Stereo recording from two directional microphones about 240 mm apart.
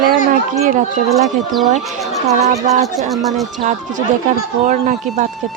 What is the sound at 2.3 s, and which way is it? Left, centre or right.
Speech, right.